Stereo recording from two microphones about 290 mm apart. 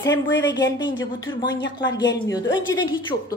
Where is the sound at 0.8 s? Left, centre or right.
Left.